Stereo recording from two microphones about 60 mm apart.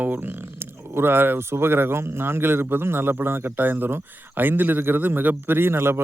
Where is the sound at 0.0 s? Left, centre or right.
Right.